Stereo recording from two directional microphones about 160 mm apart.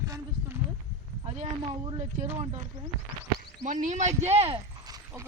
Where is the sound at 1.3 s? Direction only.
45° right (ahead or behind).